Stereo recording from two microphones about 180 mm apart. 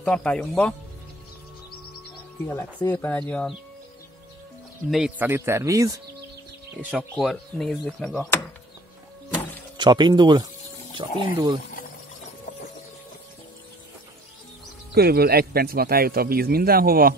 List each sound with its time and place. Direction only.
0.0 s speech: 5° left (ahead or behind)
2.4 s speech: 15° left (ahead or behind)
4.9 s speech: 5° right (ahead or behind)
6.9 s speech: 5° right (ahead or behind)
9.8 s speech: 25° right (ahead or behind)
15.0 s speech: 60° right (ahead or behind)